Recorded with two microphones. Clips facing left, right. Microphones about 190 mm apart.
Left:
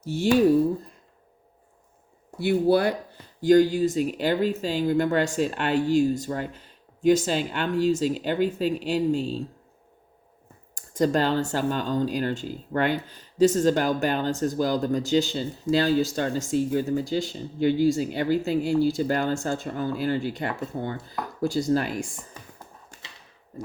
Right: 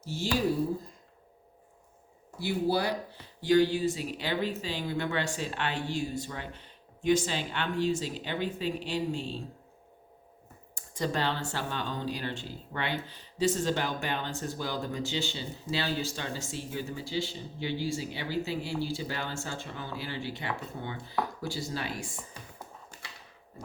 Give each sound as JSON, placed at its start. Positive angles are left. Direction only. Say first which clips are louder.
{"t": 0.0, "sound": "speech", "louder": "left 10 dB", "side_deg": 60}
{"t": 2.4, "sound": "speech", "louder": "left 8 dB", "side_deg": 60}
{"t": 10.8, "sound": "speech", "louder": "left 9 dB", "side_deg": 45}